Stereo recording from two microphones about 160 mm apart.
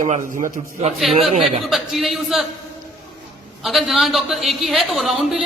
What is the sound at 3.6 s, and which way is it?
A woman's voice, centre (ahead or behind).